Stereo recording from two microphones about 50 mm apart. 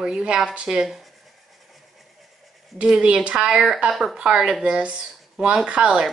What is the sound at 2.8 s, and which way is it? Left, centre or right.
Speech, centre.